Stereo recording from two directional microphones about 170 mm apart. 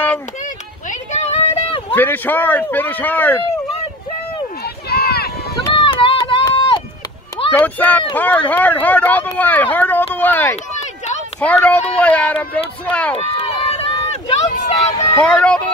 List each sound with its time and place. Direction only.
0.8 s a sound: 40° left (ahead or behind)
2.0 s speech: 10° left (ahead or behind)
4.8 s a sound: 70° left (ahead or behind)
5.7 s run: 30° left (ahead or behind)
7.5 s speech: 10° left (ahead or behind)
13.1 s run: 35° left (ahead or behind)
15.1 s speech: 5° left (ahead or behind)